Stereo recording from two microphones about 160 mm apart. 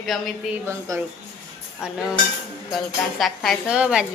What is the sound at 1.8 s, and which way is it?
Speech, 5° right (ahead or behind).